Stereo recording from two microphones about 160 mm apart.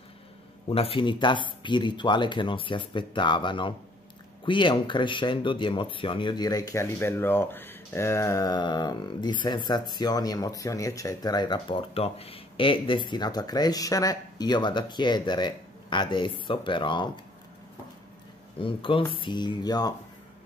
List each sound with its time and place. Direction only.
0.7 s speech: 35° left (ahead or behind)
18.6 s speech: 35° left (ahead or behind)